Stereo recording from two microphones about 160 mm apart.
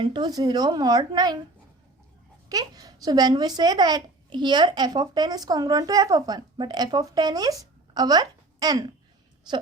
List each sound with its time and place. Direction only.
0.0 s speech: 25° right (ahead or behind)
2.5 s a woman's voice: 20° right (ahead or behind)